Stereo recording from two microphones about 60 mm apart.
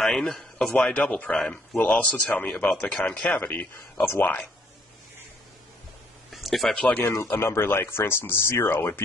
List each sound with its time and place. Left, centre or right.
0.0 s a man's voice: centre; by 4.5 s left
6.3 s a sound: centre
6.8 s speech: left
7.1 s speech: left